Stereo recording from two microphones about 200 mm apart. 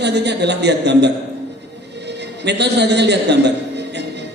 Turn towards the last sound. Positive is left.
turn(degrees=-60)  # may be behind; listen again after turning